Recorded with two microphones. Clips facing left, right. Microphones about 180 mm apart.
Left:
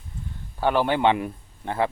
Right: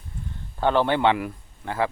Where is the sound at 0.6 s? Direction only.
10° left (ahead or behind).